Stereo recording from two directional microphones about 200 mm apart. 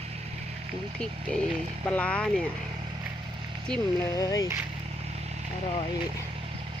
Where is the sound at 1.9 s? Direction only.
5° left (ahead or behind).